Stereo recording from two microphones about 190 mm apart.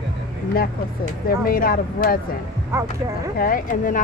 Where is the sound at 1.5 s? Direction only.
50° left (ahead or behind).